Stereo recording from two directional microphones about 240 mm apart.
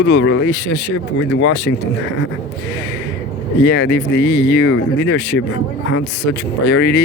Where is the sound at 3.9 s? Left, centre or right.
Left.